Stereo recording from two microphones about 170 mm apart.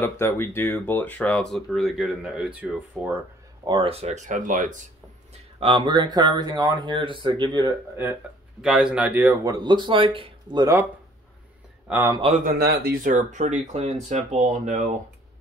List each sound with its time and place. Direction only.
0.0 s speech: 15° left (ahead or behind); by 3.2 s 10° right (ahead or behind)
3.6 s speech: 30° right (ahead or behind); by 4.8 s 50° right (ahead or behind)
5.3 s speech: 30° right (ahead or behind)
7.9 s speech: 10° right (ahead or behind)
9.5 s speech: 25° right (ahead or behind)
11.9 s speech: 15° right (ahead or behind)
12.4 s speech: 60° right (ahead or behind)